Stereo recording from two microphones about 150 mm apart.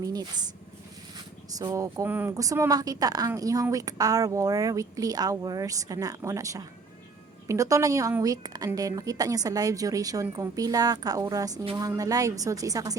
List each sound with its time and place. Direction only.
0.0 s a woman's voice: 25° right (ahead or behind)
1.5 s a woman's voice: 25° right (ahead or behind)